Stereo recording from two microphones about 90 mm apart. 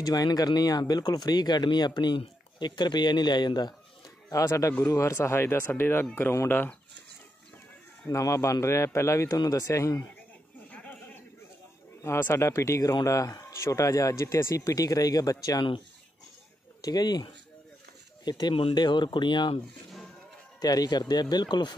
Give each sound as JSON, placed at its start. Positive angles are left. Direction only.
{"t": 0.0, "sound": "speech", "side_deg": 45}
{"t": 4.3, "sound": "speech", "side_deg": 35}
{"t": 8.1, "sound": "speech", "side_deg": 35}
{"t": 10.7, "sound": "a sound", "side_deg": 20}
{"t": 12.0, "sound": "speech", "side_deg": 30}
{"t": 16.8, "sound": "speech", "side_deg": 50}
{"t": 18.5, "sound": "speech", "side_deg": 90}
{"t": 18.8, "sound": "speech", "side_deg": 55}
{"t": 20.6, "sound": "speech", "side_deg": 45}